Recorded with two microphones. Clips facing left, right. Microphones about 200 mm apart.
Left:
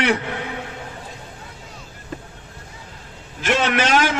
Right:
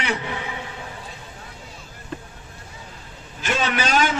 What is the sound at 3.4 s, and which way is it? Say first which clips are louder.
Speech: left 4 dB; 85° left.